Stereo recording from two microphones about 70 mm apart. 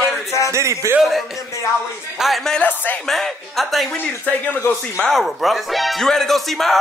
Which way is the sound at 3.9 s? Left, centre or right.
Left.